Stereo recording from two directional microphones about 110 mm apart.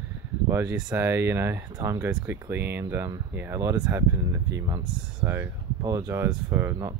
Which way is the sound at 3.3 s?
20° right (ahead or behind).